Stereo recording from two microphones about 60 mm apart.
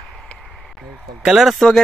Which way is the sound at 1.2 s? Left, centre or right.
Centre.